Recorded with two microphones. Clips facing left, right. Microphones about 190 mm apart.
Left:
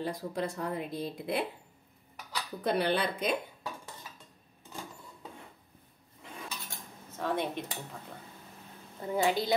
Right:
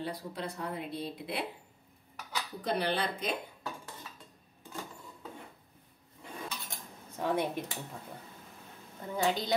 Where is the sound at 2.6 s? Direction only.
55° left (ahead or behind).